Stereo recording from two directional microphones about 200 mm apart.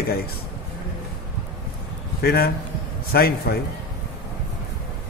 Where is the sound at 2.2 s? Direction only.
50° left (ahead or behind).